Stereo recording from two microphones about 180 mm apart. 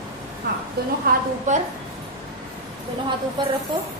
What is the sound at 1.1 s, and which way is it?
Speech, 55° right (ahead or behind).